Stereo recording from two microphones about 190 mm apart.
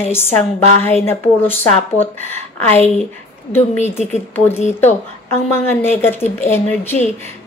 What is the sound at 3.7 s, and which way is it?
Speech, 35° left (ahead or behind).